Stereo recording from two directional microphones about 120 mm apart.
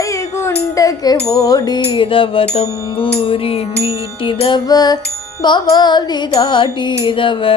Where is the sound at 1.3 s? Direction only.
30° left (ahead or behind).